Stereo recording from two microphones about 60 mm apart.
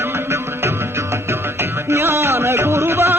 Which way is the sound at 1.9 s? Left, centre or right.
Right.